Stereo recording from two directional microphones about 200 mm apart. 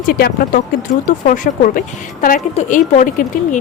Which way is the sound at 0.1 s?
50° left (ahead or behind).